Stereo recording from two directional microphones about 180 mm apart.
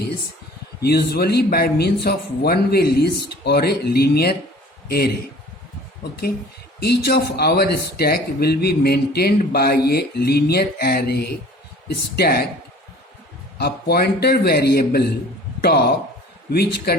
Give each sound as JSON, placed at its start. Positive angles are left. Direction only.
{"t": 0.8, "sound": "speech", "side_deg": 65}
{"t": 13.6, "sound": "speech", "side_deg": 65}
{"t": 16.9, "sound": "speech", "side_deg": 60}